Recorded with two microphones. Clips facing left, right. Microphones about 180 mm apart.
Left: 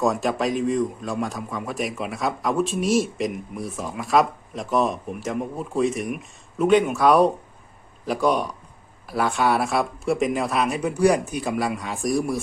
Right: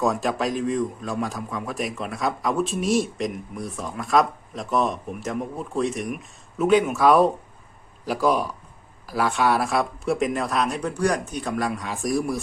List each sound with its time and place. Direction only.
0.0 s a man's voice: centre (ahead or behind)